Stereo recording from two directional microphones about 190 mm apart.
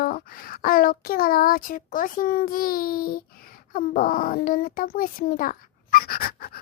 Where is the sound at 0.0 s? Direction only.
50° left (ahead or behind).